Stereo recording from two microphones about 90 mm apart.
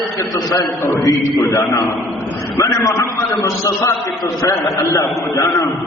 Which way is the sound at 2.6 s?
40° left (ahead or behind).